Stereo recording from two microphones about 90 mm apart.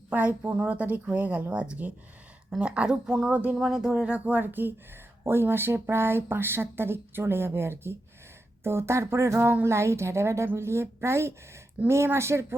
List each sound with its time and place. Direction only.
0.4 s a woman's voice: 15° right (ahead or behind)